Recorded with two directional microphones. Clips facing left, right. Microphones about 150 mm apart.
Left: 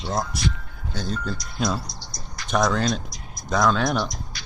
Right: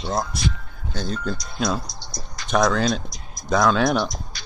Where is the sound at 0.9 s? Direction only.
5° left (ahead or behind).